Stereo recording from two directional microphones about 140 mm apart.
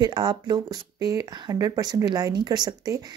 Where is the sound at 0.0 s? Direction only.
30° right (ahead or behind).